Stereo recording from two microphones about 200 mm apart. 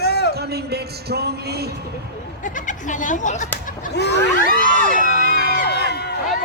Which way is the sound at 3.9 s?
60° left (ahead or behind).